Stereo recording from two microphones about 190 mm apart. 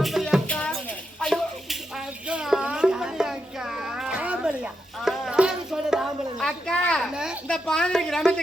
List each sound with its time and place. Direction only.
0.0 s music: centre (ahead or behind)
1.2 s a sound: centre (ahead or behind)
2.2 s music: 5° right (ahead or behind)
7.4 s speech: 5° left (ahead or behind)